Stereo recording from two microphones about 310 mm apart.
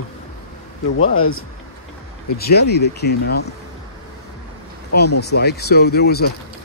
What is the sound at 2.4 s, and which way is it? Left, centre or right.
Speech, left.